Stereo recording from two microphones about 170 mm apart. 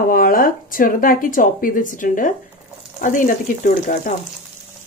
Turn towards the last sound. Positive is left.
turn(degrees=50)  # may be behind; listen again after turning